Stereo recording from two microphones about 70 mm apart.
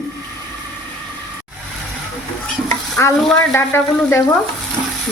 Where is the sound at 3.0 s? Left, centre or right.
Left.